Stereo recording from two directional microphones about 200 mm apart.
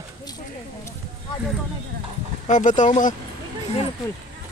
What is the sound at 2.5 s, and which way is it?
Speech, 40° left (ahead or behind).